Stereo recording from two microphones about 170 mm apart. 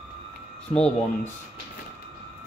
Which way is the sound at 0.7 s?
5° left (ahead or behind).